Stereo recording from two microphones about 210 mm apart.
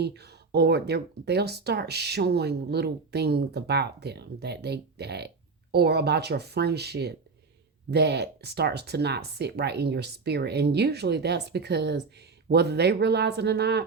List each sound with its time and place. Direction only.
0.0 s speech: 50° right (ahead or behind)